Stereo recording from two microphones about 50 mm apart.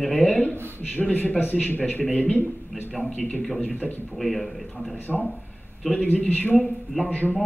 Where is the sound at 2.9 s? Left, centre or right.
Centre.